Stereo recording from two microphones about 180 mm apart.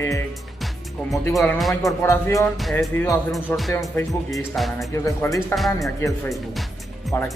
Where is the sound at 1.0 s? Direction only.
5° left (ahead or behind).